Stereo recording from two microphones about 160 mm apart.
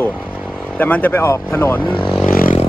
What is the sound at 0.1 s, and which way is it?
Vehicle, 5° right (ahead or behind).